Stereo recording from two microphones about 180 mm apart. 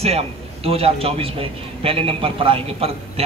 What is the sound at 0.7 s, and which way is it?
A man's voice, 35° right (ahead or behind).